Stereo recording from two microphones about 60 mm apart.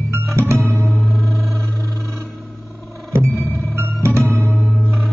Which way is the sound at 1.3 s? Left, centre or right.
Centre.